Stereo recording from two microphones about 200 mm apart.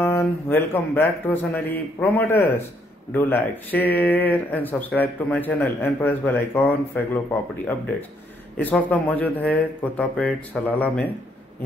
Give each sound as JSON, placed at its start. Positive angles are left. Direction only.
{"t": 0.0, "sound": "speech", "side_deg": 10}
{"t": 8.5, "sound": "speech", "side_deg": 10}